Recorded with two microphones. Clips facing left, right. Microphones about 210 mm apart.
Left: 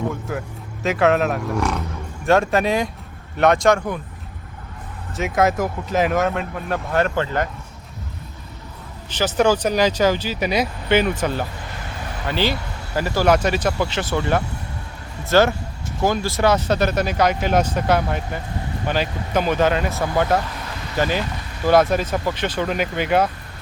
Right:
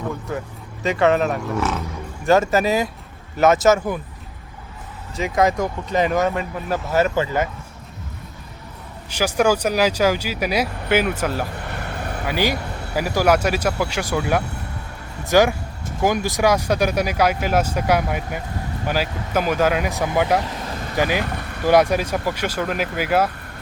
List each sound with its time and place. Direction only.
0.1 s speech: centre (ahead or behind)
5.1 s speech: centre (ahead or behind)
9.0 s speech: 10° right (ahead or behind)
11.6 s vehicle: 60° right (ahead or behind)
12.2 s speech: 10° right (ahead or behind)
20.7 s vehicle: 45° right (ahead or behind)
20.9 s speech: 10° right (ahead or behind)
21.2 s vehicle: 60° right (ahead or behind)
21.7 s speech: 15° right (ahead or behind)